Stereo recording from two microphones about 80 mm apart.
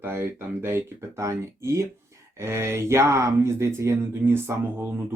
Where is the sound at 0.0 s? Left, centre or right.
Right.